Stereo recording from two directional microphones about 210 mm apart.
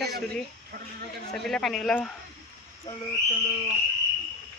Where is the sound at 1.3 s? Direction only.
Centre (ahead or behind).